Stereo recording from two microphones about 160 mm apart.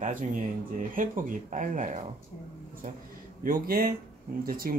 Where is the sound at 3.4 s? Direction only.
65° right (ahead or behind).